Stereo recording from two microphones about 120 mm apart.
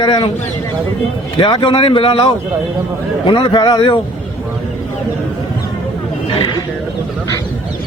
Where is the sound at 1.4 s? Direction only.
40° left (ahead or behind).